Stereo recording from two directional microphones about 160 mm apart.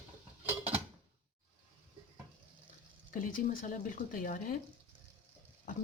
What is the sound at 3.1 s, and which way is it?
A woman's voice, 60° left (ahead or behind).